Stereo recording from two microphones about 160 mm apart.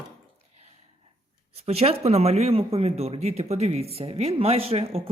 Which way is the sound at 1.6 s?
40° right (ahead or behind).